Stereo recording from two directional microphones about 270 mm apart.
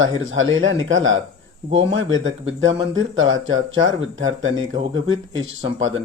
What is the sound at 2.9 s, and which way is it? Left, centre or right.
Speech, right.